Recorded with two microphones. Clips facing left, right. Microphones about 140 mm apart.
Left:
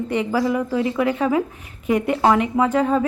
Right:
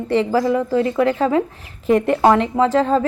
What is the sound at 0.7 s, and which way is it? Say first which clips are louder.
Speech: right 3 dB; 15° left (ahead or behind).